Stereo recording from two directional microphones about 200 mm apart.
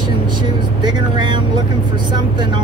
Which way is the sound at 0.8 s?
20° right (ahead or behind).